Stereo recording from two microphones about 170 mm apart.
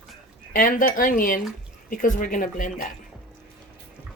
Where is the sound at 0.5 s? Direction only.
55° left (ahead or behind).